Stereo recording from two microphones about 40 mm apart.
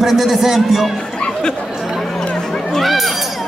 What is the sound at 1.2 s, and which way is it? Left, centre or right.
Chatter, centre.